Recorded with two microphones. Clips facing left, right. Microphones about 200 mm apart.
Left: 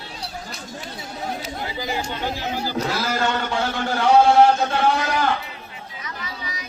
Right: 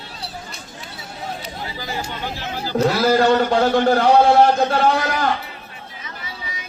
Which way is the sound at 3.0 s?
35° right (ahead or behind).